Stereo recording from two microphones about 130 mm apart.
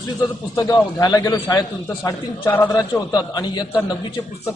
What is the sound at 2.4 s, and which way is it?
Speech, 15° left (ahead or behind).